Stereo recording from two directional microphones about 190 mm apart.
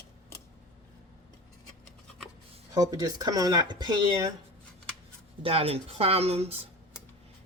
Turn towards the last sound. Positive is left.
turn(degrees=-35)  # may be behind; listen again after turning